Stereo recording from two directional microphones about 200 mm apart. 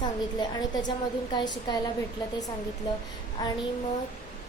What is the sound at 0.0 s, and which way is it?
A woman's voice, 20° left (ahead or behind).